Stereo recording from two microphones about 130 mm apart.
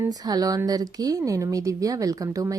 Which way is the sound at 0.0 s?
30° right (ahead or behind).